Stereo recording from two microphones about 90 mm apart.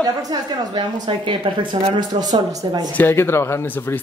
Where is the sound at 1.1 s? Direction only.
90° right.